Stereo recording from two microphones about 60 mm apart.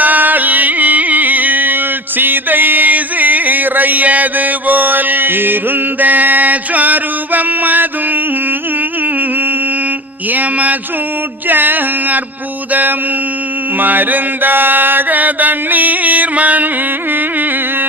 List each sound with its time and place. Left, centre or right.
0.0 s music: right
10.3 s mantra: right
11.4 s a sound: right
13.7 s mantra: right